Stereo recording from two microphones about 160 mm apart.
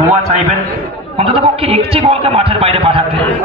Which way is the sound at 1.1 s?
35° right (ahead or behind).